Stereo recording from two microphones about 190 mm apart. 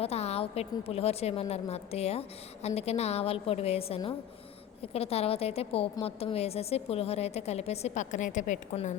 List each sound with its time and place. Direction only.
0.0 s a woman's voice: 35° left (ahead or behind)